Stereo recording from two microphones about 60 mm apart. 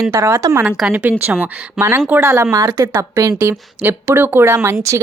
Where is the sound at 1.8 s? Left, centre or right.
Right.